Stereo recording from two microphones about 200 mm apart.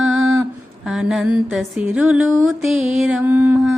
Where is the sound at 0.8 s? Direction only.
Centre (ahead or behind).